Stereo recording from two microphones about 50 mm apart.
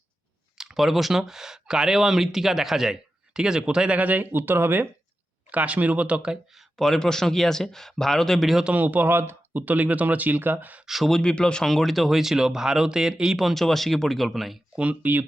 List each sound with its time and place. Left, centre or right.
0.6 s speech: centre; by 4.9 s right
5.5 s speech: right
6.7 s speech: centre
8.7 s speech: right
10.8 s speech: centre
11.2 s speech: centre
11.6 s speech: centre
13.5 s speech: centre
14.8 s speech: right